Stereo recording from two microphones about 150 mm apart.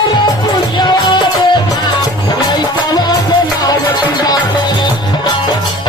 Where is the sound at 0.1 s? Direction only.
30° left (ahead or behind).